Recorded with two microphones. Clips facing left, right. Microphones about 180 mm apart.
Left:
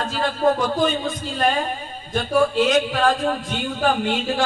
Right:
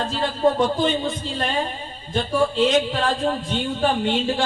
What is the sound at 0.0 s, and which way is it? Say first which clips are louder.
A man's voice: even; 30° right (ahead or behind).